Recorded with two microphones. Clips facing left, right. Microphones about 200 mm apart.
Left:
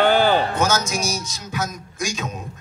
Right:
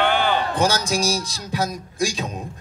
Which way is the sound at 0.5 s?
35° right (ahead or behind).